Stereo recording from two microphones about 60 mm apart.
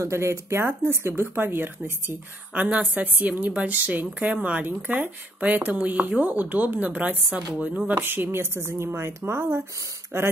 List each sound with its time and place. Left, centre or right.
0.0 s a woman's voice: right
1.2 s a woman's voice: right
7.5 s speech: centre
7.9 s a woman's voice: right